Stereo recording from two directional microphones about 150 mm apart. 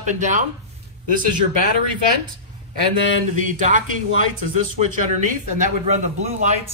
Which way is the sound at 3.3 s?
60° right (ahead or behind).